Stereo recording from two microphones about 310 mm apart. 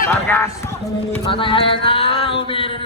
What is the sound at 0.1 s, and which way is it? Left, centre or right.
Music, centre.